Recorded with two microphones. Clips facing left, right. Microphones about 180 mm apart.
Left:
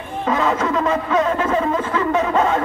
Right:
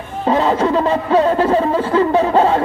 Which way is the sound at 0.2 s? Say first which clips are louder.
Right 4 dB; 30° right (ahead or behind).